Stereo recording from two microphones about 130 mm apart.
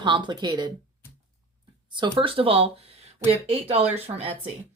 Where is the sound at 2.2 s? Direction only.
45° right (ahead or behind).